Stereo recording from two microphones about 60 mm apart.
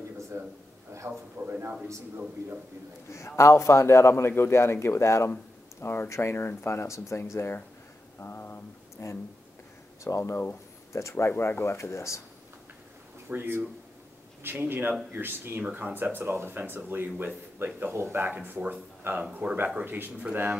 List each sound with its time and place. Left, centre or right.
0.3 s speech: right
1.0 s speech: right
3.3 s speech: left
5.8 s speech: left
6.0 s speech: left
6.3 s speech: left
8.2 s a sound: left
10.0 s speech: left
11.2 s speech: left
13.3 s speech: right
18.3 s speech: right